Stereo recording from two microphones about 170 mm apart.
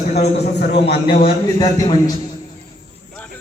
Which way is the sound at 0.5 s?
75° left (ahead or behind).